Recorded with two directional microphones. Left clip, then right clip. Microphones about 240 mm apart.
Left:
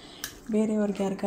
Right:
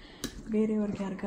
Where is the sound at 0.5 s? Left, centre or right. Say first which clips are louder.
Left 4 dB; left.